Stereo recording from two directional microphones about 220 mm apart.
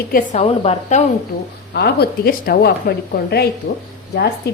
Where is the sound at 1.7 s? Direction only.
45° left (ahead or behind).